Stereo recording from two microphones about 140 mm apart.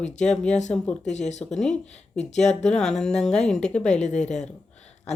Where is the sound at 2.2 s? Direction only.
55° left (ahead or behind).